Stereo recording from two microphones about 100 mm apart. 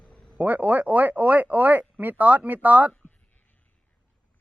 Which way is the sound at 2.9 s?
10° left (ahead or behind).